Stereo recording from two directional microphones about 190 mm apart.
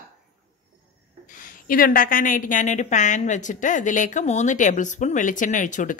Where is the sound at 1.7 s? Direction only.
50° left (ahead or behind).